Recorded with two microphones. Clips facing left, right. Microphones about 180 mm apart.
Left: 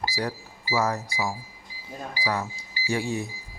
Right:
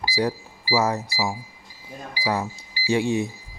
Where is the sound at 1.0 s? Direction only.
5° right (ahead or behind).